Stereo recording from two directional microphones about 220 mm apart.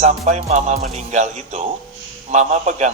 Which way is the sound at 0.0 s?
30° right (ahead or behind).